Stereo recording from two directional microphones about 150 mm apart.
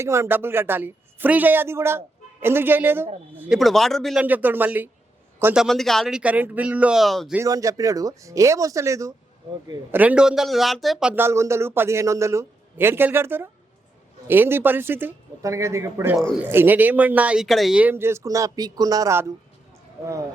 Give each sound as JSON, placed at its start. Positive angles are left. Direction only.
{"t": 0.0, "sound": "speech", "side_deg": -20}
{"t": 3.6, "sound": "speech", "side_deg": 0}
{"t": 4.2, "sound": "a man's voice", "side_deg": -10}
{"t": 5.6, "sound": "speech", "side_deg": 0}
{"t": 7.3, "sound": "speech", "side_deg": -20}
{"t": 11.1, "sound": "speech", "side_deg": -15}
{"t": 16.1, "sound": "speech", "side_deg": 0}
{"t": 16.5, "sound": "speech", "side_deg": -15}